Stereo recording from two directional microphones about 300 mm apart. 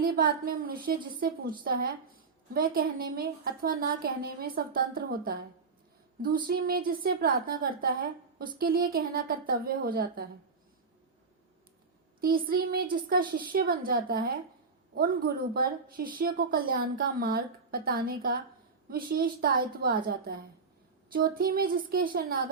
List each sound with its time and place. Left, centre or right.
0.0 s a woman's voice: right
12.2 s a woman's voice: right